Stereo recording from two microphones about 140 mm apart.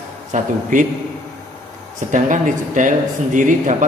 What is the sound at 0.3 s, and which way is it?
Speech, 65° right (ahead or behind).